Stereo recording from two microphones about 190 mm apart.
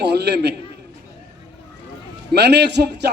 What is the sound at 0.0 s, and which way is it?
Speech, 60° right (ahead or behind).